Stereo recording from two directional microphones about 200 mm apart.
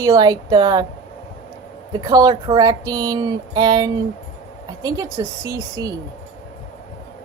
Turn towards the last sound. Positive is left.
turn(degrees=-15)  # may be behind; listen again after turning